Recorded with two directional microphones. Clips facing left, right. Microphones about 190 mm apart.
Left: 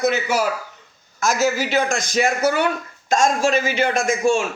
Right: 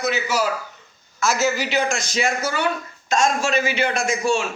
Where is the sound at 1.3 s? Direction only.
10° left (ahead or behind).